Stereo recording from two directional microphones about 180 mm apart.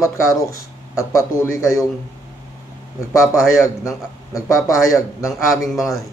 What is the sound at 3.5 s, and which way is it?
A man's voice, 15° left (ahead or behind).